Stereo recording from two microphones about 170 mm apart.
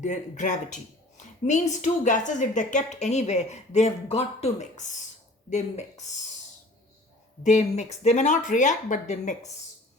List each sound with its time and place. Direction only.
0.0 s a woman's voice: 45° left (ahead or behind)
7.4 s a woman's voice: 45° left (ahead or behind)